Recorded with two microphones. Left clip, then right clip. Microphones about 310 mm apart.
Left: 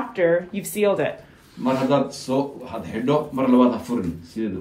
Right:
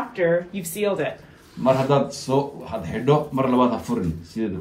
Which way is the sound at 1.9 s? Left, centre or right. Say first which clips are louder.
Right 1 dB; right.